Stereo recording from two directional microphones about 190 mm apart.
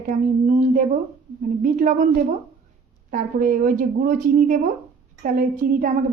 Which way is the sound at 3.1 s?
45° right (ahead or behind).